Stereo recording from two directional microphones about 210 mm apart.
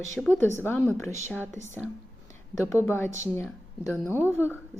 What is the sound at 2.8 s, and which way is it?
Speech, 10° left (ahead or behind).